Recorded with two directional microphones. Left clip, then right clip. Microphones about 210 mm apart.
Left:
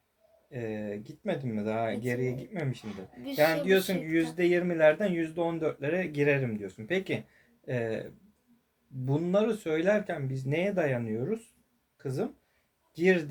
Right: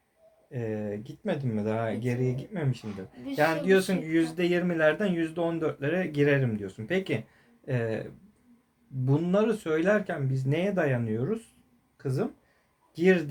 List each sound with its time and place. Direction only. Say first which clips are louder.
0.5 s speech: right 3 dB; 15° right (ahead or behind)
2.8 s speech: right 1 dB; 40° left (ahead or behind)
3.3 s speech: right 1 dB; 20° right (ahead or behind)
9.0 s a man's voice: right 2 dB; 15° right (ahead or behind)